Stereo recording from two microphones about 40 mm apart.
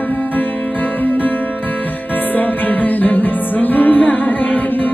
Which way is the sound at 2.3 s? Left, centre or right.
Left.